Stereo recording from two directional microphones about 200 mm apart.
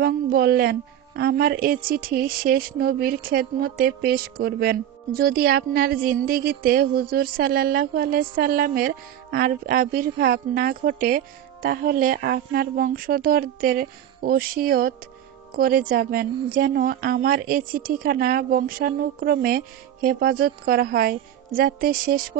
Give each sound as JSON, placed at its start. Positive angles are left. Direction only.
{"t": 0.0, "sound": "a woman's voice", "side_deg": -50}